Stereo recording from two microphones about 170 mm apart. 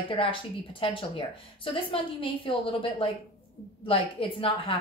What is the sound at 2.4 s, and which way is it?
A woman's voice, 30° left (ahead or behind).